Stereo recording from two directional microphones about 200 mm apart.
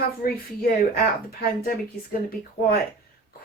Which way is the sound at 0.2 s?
45° left (ahead or behind).